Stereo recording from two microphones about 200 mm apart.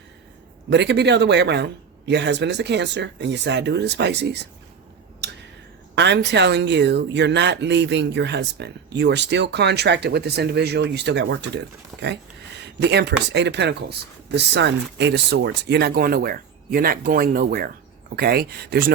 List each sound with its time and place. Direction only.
0.7 s speech: 60° right (ahead or behind)
5.9 s speech: 60° right (ahead or behind)